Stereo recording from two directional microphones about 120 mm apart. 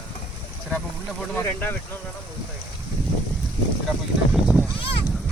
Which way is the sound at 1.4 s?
15° left (ahead or behind).